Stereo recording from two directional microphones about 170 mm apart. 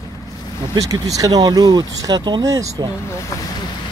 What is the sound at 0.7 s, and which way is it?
Speech, 20° right (ahead or behind).